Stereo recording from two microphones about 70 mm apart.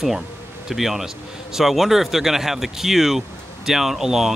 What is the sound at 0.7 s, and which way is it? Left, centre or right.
Speech, centre.